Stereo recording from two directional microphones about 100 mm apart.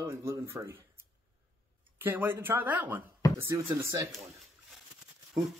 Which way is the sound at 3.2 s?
35° left (ahead or behind).